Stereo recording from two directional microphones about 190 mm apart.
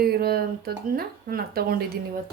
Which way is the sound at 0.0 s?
55° right (ahead or behind).